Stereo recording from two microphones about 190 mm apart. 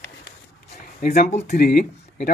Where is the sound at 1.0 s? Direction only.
40° left (ahead or behind).